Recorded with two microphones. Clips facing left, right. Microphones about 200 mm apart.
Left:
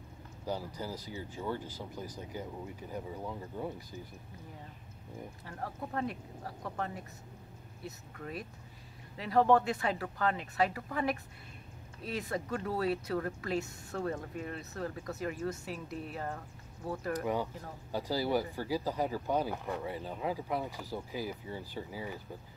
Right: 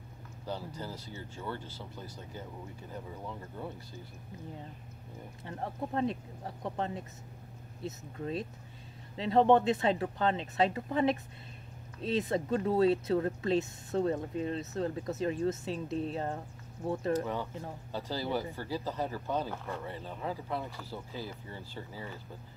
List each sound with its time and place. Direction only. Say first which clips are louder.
0.7 s speech: left 2 dB; 10° left (ahead or behind)
5.4 s speech: right 5 dB; 25° right (ahead or behind)
17.9 s speech: left 3 dB; 10° left (ahead or behind)